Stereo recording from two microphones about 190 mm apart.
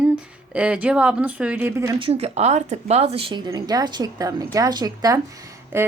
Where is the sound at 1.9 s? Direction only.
30° right (ahead or behind); by 5.9 s 15° right (ahead or behind).